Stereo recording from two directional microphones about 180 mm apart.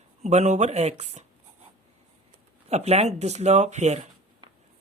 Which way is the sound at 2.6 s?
35° right (ahead or behind).